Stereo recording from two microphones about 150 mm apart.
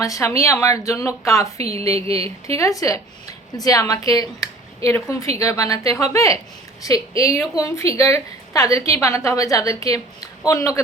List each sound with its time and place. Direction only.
0.0 s a woman's voice: 20° left (ahead or behind)
1.5 s a woman's voice: 40° right (ahead or behind)
2.6 s a woman's voice: 20° left (ahead or behind)